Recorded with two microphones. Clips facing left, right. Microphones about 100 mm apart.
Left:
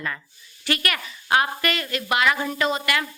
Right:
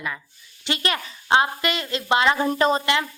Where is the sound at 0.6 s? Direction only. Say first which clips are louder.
Even; 25° right (ahead or behind).